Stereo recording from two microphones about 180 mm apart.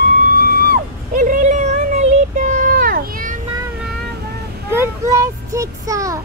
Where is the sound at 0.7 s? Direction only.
50° right (ahead or behind).